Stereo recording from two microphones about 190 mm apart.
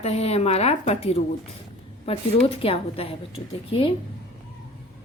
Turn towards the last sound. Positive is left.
turn(degrees=30)  # may be behind; listen again after turning